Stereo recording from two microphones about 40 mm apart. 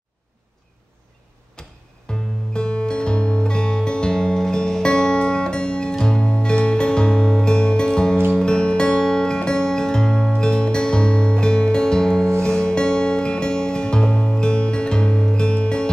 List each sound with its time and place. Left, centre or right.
1.6 s music: left